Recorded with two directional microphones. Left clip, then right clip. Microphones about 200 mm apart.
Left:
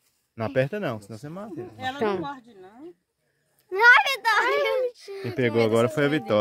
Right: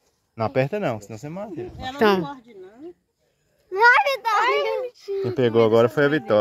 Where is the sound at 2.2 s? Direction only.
15° left (ahead or behind).